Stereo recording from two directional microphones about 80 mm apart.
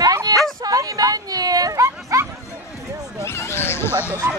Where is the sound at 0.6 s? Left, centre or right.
Right.